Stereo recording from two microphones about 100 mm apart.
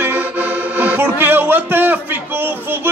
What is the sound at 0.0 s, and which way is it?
Music, 20° right (ahead or behind).